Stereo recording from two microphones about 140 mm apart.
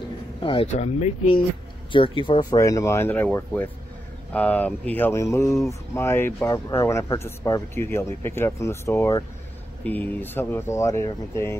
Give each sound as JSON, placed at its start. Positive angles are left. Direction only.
{"t": 0.4, "sound": "speech", "side_deg": 35}
{"t": 0.7, "sound": "speech", "side_deg": 50}
{"t": 2.5, "sound": "speech", "side_deg": 20}